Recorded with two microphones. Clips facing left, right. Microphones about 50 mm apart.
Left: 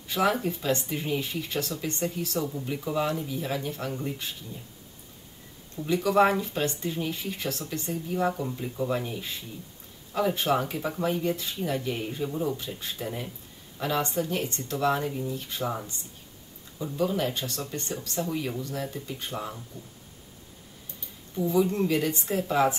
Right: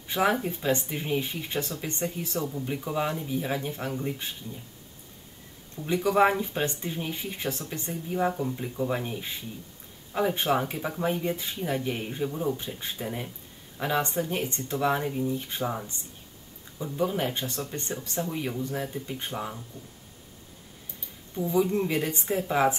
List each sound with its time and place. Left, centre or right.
0.1 s speech: centre
2.4 s speech: centre
2.7 s speech: centre
6.0 s speech: centre
7.9 s speech: centre
10.1 s speech: right
12.5 s speech: right
12.9 s speech: centre
15.3 s speech: right
16.9 s speech: centre
21.4 s speech: centre